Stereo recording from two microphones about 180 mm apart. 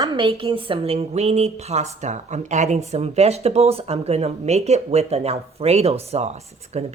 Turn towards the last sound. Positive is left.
turn(degrees=-35)  # may be behind; listen again after turning